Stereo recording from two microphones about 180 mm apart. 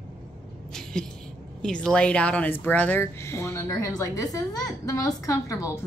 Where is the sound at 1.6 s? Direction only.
5° left (ahead or behind).